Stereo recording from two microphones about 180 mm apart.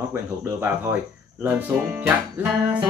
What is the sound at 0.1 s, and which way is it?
Speech, 10° right (ahead or behind).